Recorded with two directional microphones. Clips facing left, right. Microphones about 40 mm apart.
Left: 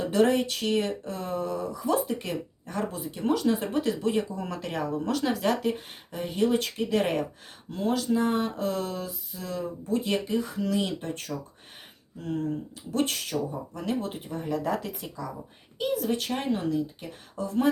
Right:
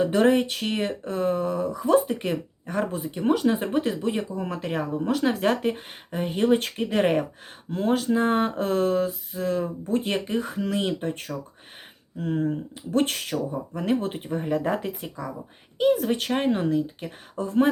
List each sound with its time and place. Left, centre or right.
0.0 s speech: right
5.3 s speech: right
12.9 s speech: right